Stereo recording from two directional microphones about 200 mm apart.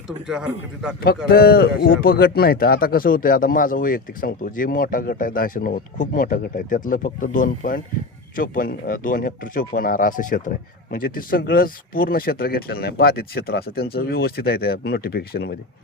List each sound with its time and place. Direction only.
0.3 s a man's voice: 5° right (ahead or behind)
1.3 s speech: 50° left (ahead or behind)